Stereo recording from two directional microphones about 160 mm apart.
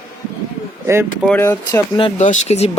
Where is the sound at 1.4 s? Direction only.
15° left (ahead or behind).